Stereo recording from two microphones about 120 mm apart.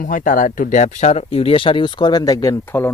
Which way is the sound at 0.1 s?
90° left.